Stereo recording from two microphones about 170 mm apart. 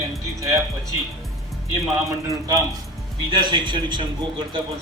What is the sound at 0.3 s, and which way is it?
Speech, 20° right (ahead or behind).